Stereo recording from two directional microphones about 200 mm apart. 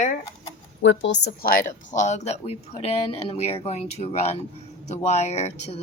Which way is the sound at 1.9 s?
35° left (ahead or behind).